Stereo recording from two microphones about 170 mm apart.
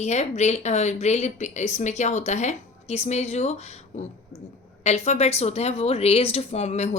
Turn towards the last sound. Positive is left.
turn(degrees=40)  # may be behind; listen again after turning